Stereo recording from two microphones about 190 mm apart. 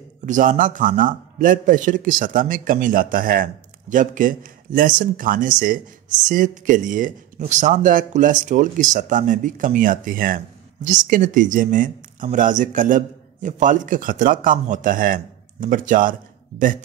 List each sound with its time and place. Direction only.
0.2 s speech: 40° right (ahead or behind)